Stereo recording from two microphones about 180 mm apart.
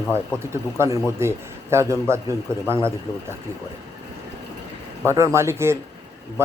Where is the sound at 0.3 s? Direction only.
15° right (ahead or behind).